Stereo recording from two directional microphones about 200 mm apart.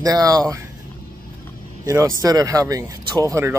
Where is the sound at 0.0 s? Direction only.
20° right (ahead or behind).